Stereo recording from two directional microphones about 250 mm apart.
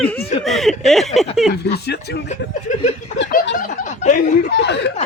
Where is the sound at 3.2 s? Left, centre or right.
Left.